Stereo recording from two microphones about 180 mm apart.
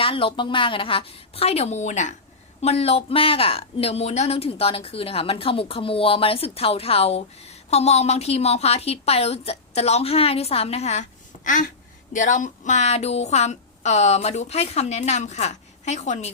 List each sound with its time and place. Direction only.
0.0 s speech: 30° left (ahead or behind)
11.4 s babbling: 45° left (ahead or behind)
12.1 s speech: 45° left (ahead or behind)